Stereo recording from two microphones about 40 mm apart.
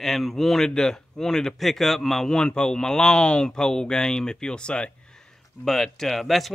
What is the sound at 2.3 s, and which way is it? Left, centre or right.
Speech, left.